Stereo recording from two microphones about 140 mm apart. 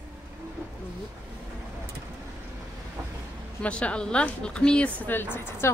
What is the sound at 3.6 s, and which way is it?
Speech, 10° left (ahead or behind).